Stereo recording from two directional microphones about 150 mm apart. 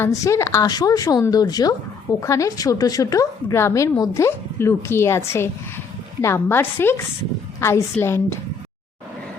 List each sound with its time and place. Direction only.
0.0 s a woman's voice: 20° left (ahead or behind)